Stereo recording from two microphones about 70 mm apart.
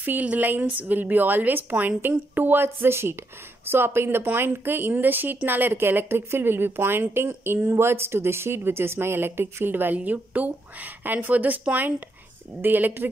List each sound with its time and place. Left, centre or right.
0.0 s speech: right